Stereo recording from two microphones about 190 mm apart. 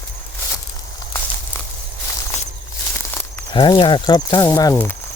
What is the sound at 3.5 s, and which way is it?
Speech, 25° left (ahead or behind).